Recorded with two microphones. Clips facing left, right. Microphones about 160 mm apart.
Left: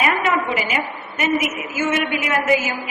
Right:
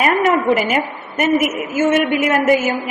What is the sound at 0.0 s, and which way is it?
A woman's voice, 45° right (ahead or behind).